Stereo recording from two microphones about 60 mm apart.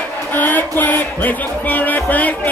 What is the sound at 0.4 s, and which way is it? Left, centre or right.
Music, left.